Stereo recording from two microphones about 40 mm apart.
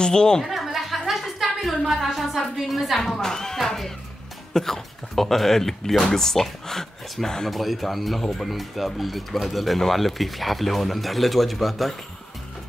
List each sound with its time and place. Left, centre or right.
0.0 s speech: centre
0.4 s a sound: centre
2.0 s speech: centre
3.0 s speech: centre
7.5 s speech: centre